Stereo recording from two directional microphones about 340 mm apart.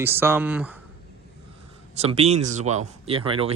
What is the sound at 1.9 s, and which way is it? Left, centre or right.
Speech, centre.